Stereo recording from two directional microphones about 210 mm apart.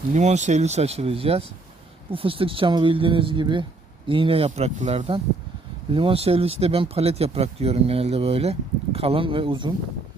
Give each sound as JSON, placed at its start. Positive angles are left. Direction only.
{"t": 0.1, "sound": "speech", "side_deg": -35}